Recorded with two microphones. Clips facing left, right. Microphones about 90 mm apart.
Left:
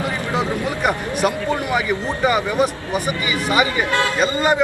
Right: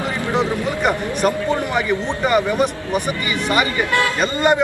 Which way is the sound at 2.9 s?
45° right (ahead or behind).